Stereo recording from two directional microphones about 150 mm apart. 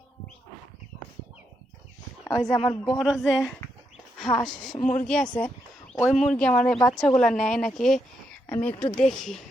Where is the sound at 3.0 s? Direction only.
Centre (ahead or behind).